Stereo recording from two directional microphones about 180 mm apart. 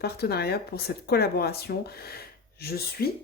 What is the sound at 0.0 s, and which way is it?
Speech, 60° left (ahead or behind).